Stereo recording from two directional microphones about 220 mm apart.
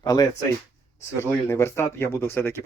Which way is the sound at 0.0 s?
15° left (ahead or behind).